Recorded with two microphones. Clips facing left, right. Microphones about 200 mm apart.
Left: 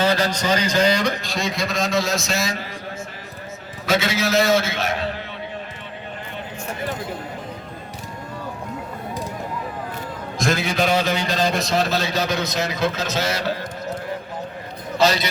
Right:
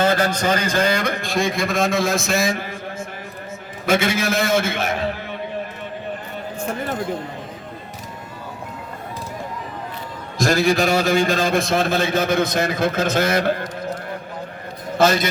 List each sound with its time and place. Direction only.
0.0 s a man's voice: 50° right (ahead or behind)
3.8 s a man's voice: 50° right (ahead or behind)
10.4 s a man's voice: 40° right (ahead or behind)
14.9 s a man's voice: 50° right (ahead or behind)